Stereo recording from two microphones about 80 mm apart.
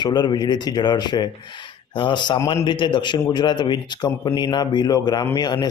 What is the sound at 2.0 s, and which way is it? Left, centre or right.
Speech, left.